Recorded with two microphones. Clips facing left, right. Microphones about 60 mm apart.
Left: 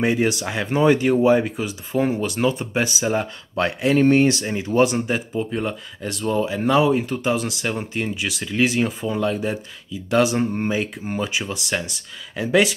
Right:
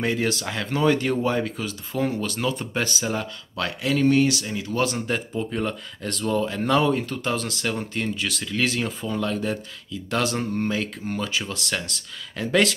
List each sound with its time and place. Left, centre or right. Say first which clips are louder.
0.0 s speech: left 4 dB; centre
3.2 s speech: left 6 dB; left; by 12.7 s centre